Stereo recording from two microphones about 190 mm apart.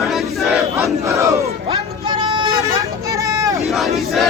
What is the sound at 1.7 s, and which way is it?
Vehicle, 25° right (ahead or behind).